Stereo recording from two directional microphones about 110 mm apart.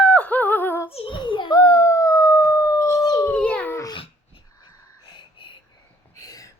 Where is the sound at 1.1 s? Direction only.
45° left (ahead or behind).